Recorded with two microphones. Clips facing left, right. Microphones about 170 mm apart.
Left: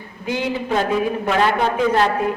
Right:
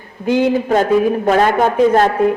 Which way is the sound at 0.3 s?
45° right (ahead or behind).